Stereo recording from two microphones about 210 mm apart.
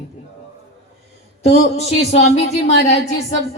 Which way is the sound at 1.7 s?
30° left (ahead or behind).